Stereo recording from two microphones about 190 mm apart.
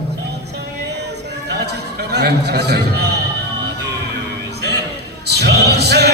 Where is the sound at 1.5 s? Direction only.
60° right (ahead or behind).